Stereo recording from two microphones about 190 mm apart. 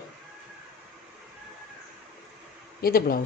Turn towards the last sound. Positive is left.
turn(degrees=50)  # may be behind; listen again after turning